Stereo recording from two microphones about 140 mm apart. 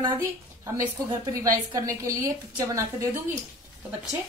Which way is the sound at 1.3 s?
25° right (ahead or behind).